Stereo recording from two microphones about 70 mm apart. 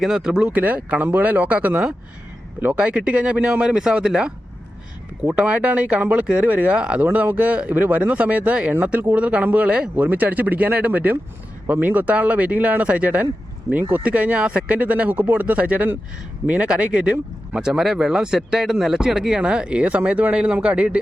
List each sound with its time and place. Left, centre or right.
0.0 s speech: centre
5.3 s speech: centre